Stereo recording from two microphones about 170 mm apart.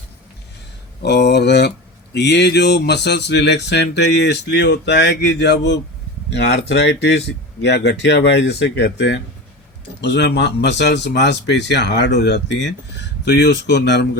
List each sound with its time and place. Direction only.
1.0 s speech: 75° left (ahead or behind)